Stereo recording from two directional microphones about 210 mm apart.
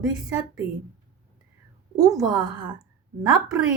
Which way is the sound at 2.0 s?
15° right (ahead or behind).